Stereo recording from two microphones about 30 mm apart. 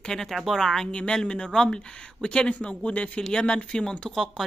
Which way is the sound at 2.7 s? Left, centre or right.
Left.